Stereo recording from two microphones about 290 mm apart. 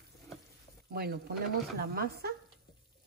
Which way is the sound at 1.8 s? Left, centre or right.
Right.